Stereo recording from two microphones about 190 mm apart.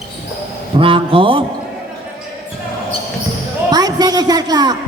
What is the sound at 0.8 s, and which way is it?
Speech, 30° right (ahead or behind).